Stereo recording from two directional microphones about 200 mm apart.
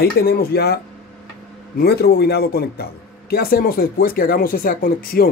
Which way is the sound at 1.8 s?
50° left (ahead or behind).